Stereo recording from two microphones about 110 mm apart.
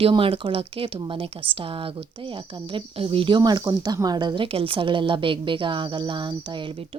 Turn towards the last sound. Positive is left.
turn(degrees=-50)  # may be behind; listen again after turning